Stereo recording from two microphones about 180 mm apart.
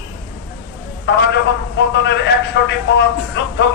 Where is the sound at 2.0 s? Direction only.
70° left (ahead or behind).